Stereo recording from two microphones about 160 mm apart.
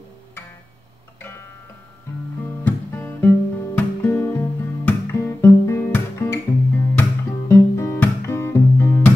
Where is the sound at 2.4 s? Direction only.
15° left (ahead or behind).